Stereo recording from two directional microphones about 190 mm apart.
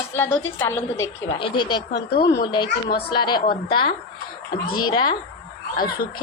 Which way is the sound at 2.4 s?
25° left (ahead or behind).